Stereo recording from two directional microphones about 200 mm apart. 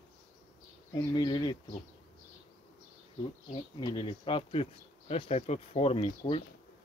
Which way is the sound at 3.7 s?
20° left (ahead or behind).